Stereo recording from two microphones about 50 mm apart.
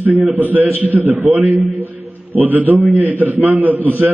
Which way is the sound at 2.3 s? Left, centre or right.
Right.